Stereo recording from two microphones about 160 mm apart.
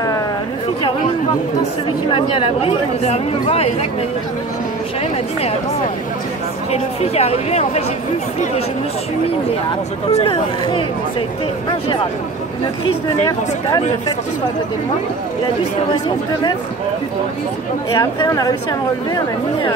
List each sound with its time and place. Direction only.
2.0 s speech: 35° left (ahead or behind)
6.7 s speech: 40° left (ahead or behind)
10.1 s speech: 35° left (ahead or behind)
13.2 s speech: 20° left (ahead or behind)
17.9 s speech: 20° left (ahead or behind)